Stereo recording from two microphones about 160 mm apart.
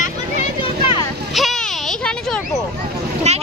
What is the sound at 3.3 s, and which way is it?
Speech, 45° right (ahead or behind).